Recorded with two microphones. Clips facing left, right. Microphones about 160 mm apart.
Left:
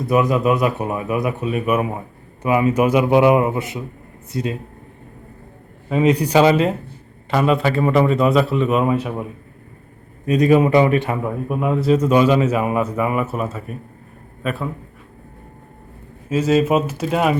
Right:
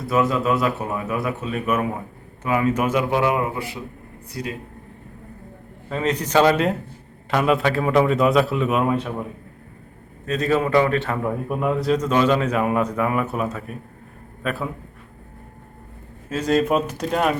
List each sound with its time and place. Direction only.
0.0 s speech: 15° left (ahead or behind)
5.9 s a man's voice: 10° left (ahead or behind)
10.2 s speech: 15° left (ahead or behind)
11.2 s a man's voice: centre (ahead or behind)
16.3 s a man's voice: 5° left (ahead or behind)